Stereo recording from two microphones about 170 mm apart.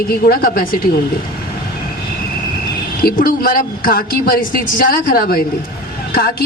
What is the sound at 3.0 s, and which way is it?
Speech, 60° left (ahead or behind).